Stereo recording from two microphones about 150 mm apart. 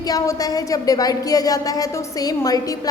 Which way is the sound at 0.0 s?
25° left (ahead or behind).